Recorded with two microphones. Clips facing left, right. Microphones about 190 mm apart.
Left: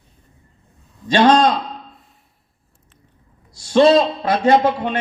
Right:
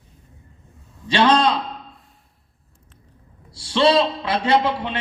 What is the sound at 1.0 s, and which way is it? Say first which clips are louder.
Speech: left 4 dB; 45° left (ahead or behind).